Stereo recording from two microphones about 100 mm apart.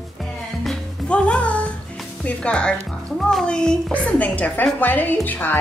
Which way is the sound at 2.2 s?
10° left (ahead or behind).